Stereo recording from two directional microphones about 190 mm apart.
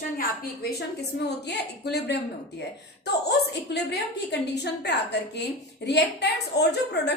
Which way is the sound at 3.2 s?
60° left (ahead or behind).